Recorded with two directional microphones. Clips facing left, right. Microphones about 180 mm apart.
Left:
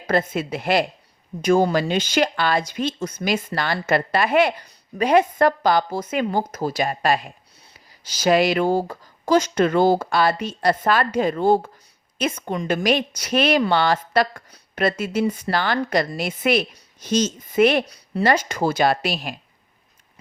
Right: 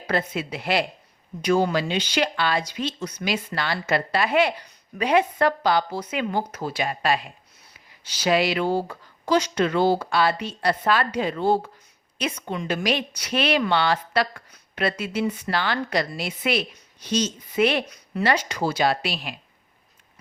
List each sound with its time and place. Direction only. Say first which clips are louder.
0.1 s speech: left 4 dB; 45° left (ahead or behind)